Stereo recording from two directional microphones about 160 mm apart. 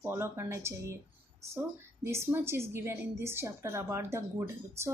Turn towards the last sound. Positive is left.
turn(degrees=-15)  # may be behind; listen again after turning